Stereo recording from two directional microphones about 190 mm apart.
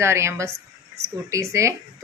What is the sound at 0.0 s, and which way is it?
Speech, 15° right (ahead or behind).